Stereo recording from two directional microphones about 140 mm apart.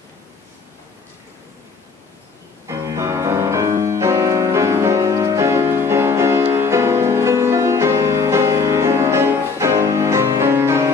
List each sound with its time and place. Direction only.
2.6 s music: 25° right (ahead or behind)